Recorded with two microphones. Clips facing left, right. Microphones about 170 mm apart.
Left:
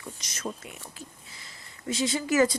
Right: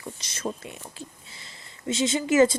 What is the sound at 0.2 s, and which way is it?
A woman's voice, 30° right (ahead or behind).